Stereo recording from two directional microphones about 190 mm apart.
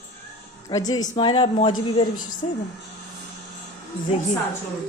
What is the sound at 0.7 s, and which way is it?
A woman's voice, 20° left (ahead or behind).